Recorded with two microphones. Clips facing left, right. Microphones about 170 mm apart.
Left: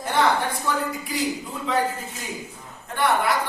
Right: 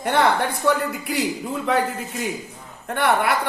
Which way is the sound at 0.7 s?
65° right (ahead or behind).